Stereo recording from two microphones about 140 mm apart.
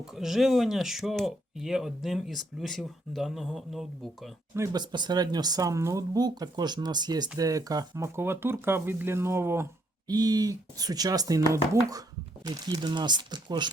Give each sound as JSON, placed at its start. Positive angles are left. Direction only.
{"t": 0.0, "sound": "speech", "side_deg": -5}
{"t": 4.5, "sound": "speech", "side_deg": -25}